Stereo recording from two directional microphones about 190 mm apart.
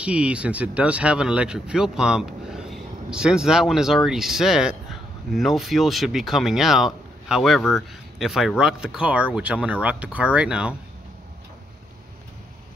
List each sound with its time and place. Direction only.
0.0 s speech: 5° right (ahead or behind)